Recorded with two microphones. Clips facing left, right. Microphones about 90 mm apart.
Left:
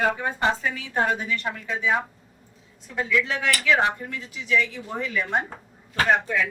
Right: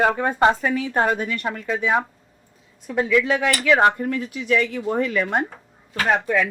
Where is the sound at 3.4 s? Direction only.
60° right (ahead or behind).